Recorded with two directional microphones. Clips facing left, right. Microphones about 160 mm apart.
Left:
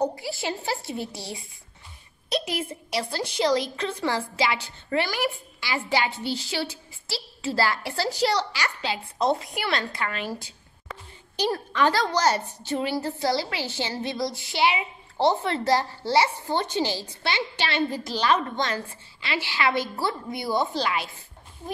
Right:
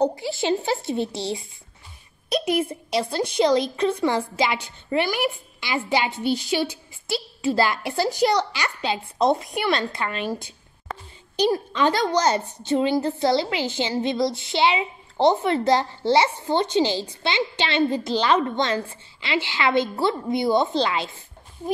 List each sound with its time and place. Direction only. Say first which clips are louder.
0.0 s a woman's voice: right 5 dB; 25° right (ahead or behind)